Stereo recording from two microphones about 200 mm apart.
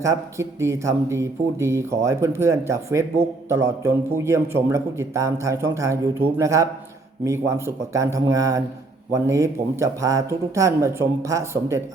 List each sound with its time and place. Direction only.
0.0 s speech: 15° right (ahead or behind)